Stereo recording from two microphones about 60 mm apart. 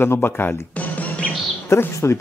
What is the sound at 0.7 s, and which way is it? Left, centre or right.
Music, left.